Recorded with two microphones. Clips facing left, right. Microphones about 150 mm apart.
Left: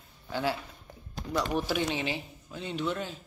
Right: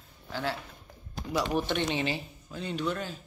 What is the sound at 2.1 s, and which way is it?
Speech, 20° left (ahead or behind).